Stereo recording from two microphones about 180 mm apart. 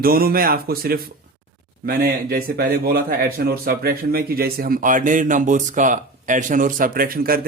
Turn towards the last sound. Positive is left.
turn(degrees=-55)  # may be behind; listen again after turning